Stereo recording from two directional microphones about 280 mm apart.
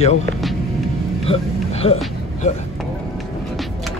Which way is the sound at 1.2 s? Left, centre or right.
Left.